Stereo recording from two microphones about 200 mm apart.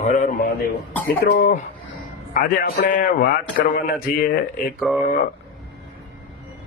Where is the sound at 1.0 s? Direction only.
50° left (ahead or behind).